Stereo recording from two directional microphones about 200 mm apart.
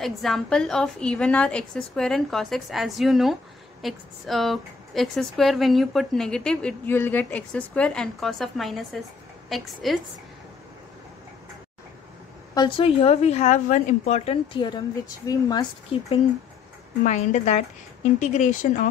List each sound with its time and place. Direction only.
0.0 s a woman's voice: centre (ahead or behind)
12.5 s a woman's voice: 25° left (ahead or behind)
17.0 s a woman's voice: 35° left (ahead or behind)